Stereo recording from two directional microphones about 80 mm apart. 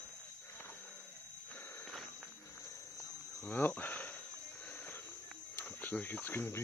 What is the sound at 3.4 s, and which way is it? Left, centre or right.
Speech, left.